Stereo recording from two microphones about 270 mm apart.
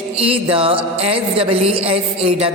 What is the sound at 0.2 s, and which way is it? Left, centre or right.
A woman's voice, right.